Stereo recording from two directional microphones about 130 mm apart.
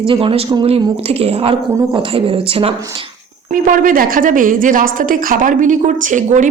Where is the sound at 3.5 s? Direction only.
90° right.